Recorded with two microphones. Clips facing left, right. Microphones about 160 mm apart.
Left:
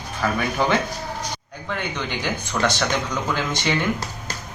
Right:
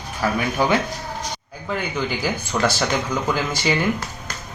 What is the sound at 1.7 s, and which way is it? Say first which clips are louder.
Speech: right 3 dB; 5° right (ahead or behind).